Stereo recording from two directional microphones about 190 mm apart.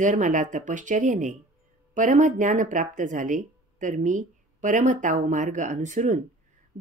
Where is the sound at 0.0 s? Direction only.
40° right (ahead or behind).